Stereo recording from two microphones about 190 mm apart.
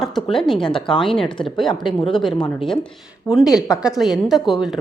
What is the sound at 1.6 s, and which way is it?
Speech, 25° left (ahead or behind).